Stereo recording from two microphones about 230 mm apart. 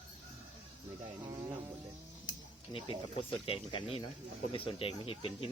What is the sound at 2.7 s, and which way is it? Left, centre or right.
Speech, left.